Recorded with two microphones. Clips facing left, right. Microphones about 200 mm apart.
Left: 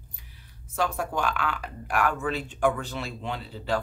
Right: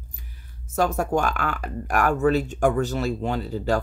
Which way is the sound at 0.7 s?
45° right (ahead or behind).